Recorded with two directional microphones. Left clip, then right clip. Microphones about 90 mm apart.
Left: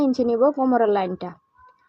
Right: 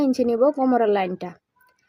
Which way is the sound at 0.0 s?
45° left (ahead or behind).